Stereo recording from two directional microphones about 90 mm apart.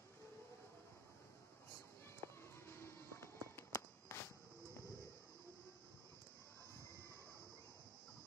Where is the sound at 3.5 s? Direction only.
30° left (ahead or behind).